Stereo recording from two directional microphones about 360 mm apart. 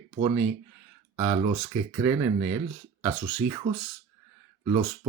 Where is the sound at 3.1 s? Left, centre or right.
Centre.